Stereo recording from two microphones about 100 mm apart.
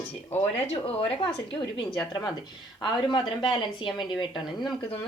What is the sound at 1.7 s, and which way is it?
Speech, 50° left (ahead or behind).